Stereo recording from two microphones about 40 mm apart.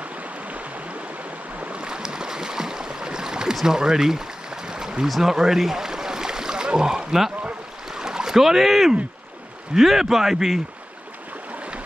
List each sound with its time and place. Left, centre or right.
0.5 s stream: right
1.6 s boat: right
3.6 s a sound: centre
5.0 s speech: centre
5.3 s a sound: centre
9.8 s a man's voice: centre